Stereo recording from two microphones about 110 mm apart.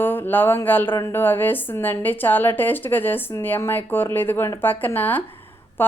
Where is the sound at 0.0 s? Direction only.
20° left (ahead or behind).